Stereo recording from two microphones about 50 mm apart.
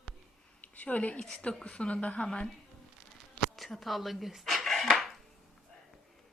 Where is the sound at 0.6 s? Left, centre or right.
Left.